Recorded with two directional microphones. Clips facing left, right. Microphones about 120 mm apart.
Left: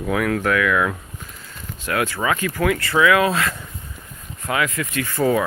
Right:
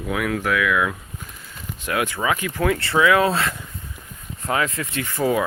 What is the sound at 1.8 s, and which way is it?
Speech, 20° right (ahead or behind).